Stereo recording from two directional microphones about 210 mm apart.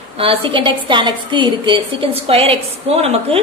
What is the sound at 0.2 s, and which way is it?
A woman's voice, 25° right (ahead or behind).